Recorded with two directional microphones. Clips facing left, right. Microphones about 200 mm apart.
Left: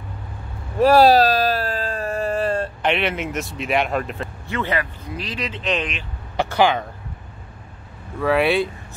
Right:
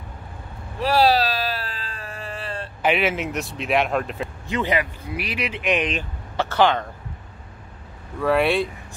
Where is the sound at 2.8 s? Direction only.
5° right (ahead or behind).